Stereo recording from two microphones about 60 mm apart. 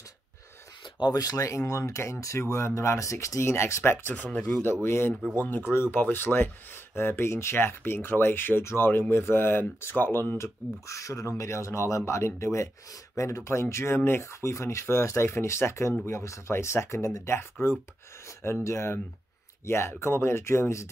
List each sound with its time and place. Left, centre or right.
1.1 s speech: left
4.1 s speech: left
4.8 s speech: left
10.3 s speech: left
13.1 s speech: left
14.5 s speech: left
17.4 s speech: left
18.4 s speech: left